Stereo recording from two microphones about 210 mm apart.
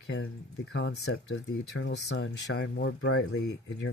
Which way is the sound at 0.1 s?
90° left.